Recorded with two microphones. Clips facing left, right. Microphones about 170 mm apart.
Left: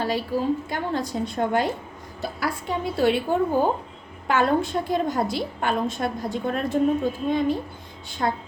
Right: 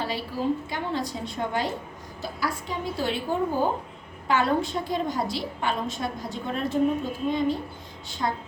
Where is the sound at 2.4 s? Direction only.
60° left (ahead or behind).